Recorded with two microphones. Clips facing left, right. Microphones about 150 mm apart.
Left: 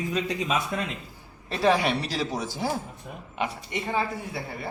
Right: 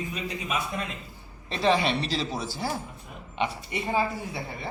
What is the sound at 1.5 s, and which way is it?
Speech, 5° left (ahead or behind).